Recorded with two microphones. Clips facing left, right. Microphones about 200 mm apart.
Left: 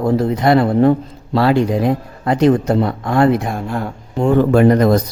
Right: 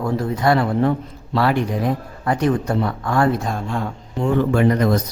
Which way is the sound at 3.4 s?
10° left (ahead or behind).